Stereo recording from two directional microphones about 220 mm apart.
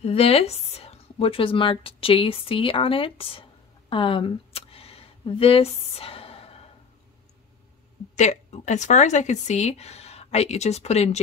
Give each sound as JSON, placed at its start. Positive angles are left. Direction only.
{"t": 0.0, "sound": "speech", "side_deg": 25}
{"t": 3.9, "sound": "a sound", "side_deg": 25}
{"t": 8.2, "sound": "speech", "side_deg": 30}